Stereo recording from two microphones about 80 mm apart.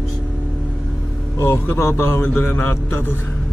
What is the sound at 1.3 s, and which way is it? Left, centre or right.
A man's voice, left.